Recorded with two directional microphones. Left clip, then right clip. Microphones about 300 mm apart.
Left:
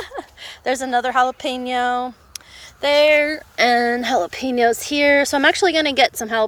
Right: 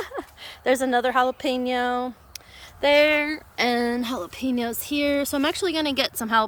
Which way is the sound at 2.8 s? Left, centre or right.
Centre.